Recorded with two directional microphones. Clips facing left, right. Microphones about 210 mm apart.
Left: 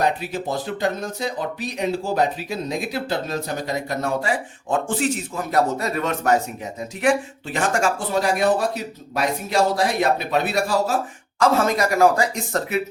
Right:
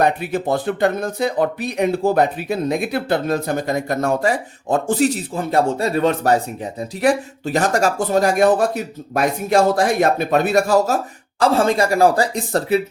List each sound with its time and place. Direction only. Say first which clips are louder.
0.0 s speech: right 4 dB; 55° right (ahead or behind); by 12.8 s 35° right (ahead or behind)